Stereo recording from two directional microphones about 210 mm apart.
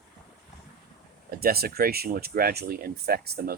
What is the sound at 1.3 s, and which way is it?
Speech, 45° right (ahead or behind).